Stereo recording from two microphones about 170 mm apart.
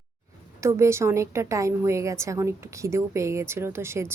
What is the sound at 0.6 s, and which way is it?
A woman's voice, 15° right (ahead or behind).